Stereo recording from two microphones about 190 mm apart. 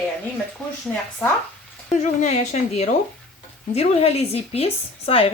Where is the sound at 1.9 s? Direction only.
35° left (ahead or behind).